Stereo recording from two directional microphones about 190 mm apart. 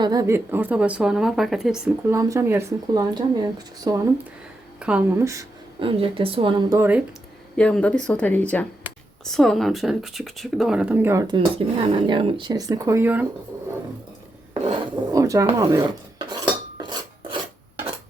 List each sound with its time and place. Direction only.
0.0 s a woman's voice: 20° right (ahead or behind); by 1.9 s 5° right (ahead or behind)
2.0 s speech: 15° right (ahead or behind)
4.8 s speech: 5° right (ahead or behind)
5.8 s speech: 30° right (ahead or behind)
6.7 s speech: 10° right (ahead or behind)
7.5 s speech: 5° left (ahead or behind); by 13.2 s 10° right (ahead or behind)
14.6 s filing: 20° right (ahead or behind)